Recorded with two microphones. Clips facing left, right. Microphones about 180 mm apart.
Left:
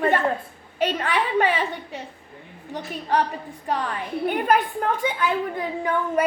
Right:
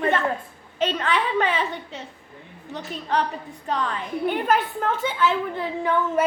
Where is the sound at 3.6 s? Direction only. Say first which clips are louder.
Even; 60° left (ahead or behind).